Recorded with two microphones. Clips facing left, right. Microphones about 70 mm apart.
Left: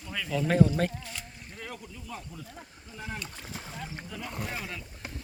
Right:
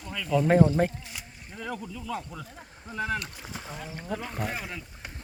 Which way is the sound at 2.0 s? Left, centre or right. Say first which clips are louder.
Right 7 dB; right.